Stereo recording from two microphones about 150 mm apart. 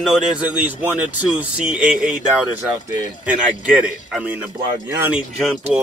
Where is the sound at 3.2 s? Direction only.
5° right (ahead or behind).